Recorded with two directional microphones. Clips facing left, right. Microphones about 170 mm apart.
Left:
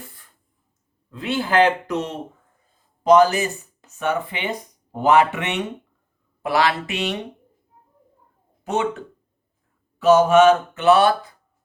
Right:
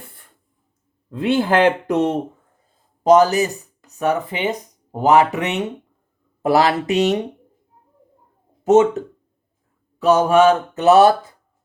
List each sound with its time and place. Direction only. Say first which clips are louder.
1.1 s speech: right 3 dB; 55° right (ahead or behind)
3.0 s mantra: right 2 dB; 40° right (ahead or behind)
8.6 s mantra: right 10 dB; 40° right (ahead or behind)